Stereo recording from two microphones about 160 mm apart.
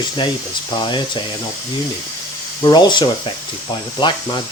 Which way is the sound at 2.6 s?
30° left (ahead or behind).